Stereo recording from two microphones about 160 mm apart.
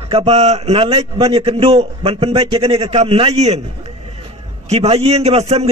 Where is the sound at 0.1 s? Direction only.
40° right (ahead or behind).